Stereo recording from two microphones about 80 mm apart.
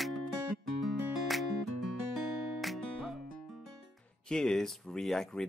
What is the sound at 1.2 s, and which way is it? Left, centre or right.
Music, centre.